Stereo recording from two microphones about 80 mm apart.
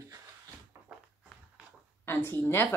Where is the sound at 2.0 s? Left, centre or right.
Left.